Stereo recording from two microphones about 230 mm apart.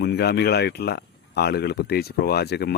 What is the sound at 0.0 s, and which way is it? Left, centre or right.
Speech, left.